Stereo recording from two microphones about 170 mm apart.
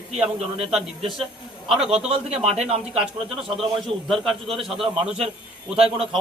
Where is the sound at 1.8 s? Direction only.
35° right (ahead or behind).